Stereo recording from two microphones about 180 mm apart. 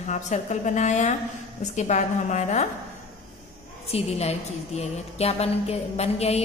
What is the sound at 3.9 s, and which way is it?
A woman's voice, 35° left (ahead or behind).